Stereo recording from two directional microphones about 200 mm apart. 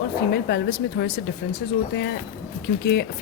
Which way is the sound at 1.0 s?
60° left (ahead or behind).